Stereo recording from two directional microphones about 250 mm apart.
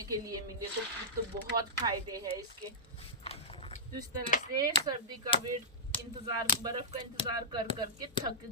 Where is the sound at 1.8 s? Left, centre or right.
Centre.